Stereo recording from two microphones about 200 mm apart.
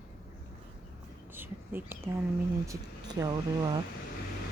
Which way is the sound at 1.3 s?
10° right (ahead or behind).